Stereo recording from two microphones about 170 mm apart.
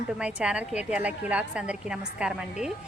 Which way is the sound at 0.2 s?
5° right (ahead or behind).